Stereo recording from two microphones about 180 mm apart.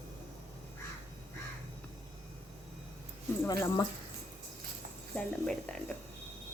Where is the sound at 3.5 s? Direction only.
20° left (ahead or behind).